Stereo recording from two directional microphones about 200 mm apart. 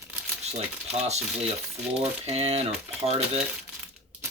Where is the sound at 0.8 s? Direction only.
35° right (ahead or behind).